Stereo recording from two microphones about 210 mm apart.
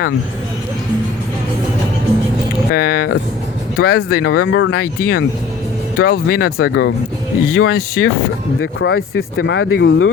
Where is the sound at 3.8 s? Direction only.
45° left (ahead or behind).